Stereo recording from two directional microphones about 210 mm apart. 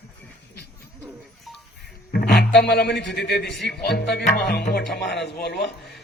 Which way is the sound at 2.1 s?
50° left (ahead or behind).